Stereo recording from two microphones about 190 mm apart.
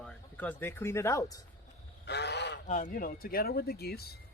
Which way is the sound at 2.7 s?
40° left (ahead or behind).